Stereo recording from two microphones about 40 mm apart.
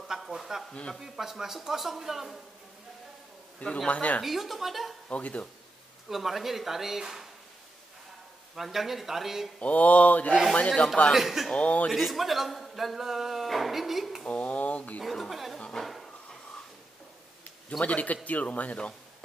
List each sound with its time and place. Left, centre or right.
0.4 s a man's voice: centre
3.5 s a man's voice: left
4.2 s a man's voice: centre
5.1 s a man's voice: left
6.0 s a man's voice: centre
8.5 s a man's voice: centre
9.6 s a man's voice: left
11.1 s a man's voice: centre
11.5 s a man's voice: left
11.9 s a man's voice: centre
14.2 s a sound: left
15.0 s a man's voice: centre
15.7 s drawer open or close: centre
17.6 s a man's voice: left